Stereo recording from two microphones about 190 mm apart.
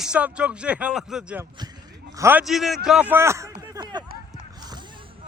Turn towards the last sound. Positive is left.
turn(degrees=-20)  # may be behind; listen again after turning